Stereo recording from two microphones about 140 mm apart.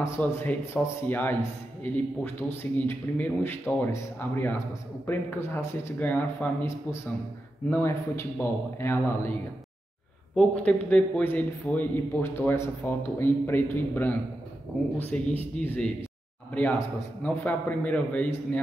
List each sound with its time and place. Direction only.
0.0 s a man's voice: 20° left (ahead or behind)
10.3 s a man's voice: 10° left (ahead or behind)